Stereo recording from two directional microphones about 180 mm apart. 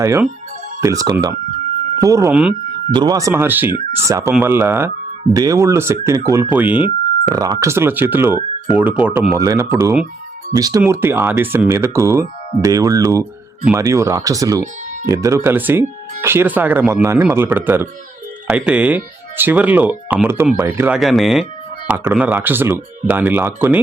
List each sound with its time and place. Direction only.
0.0 s speech: 15° right (ahead or behind)
2.3 s speech: 5° right (ahead or behind)
2.9 s speech: 20° right (ahead or behind)
21.0 s speech: centre (ahead or behind)